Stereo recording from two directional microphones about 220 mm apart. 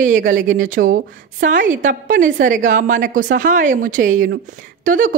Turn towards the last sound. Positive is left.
turn(degrees=-40)  # may be behind; listen again after turning